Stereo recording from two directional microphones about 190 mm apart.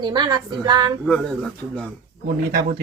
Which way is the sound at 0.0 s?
20° right (ahead or behind).